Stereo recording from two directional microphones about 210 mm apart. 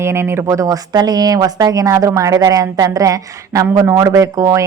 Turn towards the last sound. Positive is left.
turn(degrees=-15)  # may be behind; listen again after turning